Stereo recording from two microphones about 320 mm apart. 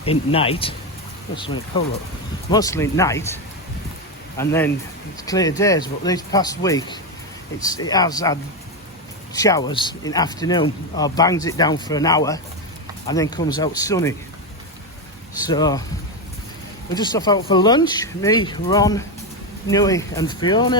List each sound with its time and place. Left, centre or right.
0.0 s speech: centre
2.5 s speech: centre
15.4 s speech: centre
16.9 s speech: centre